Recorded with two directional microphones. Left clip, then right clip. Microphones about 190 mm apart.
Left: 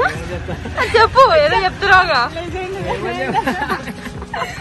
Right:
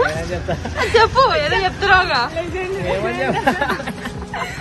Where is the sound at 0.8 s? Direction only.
15° right (ahead or behind).